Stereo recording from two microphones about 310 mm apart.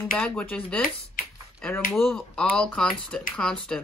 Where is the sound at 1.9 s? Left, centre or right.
Centre.